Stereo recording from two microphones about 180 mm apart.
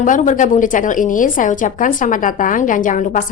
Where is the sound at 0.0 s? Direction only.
45° left (ahead or behind).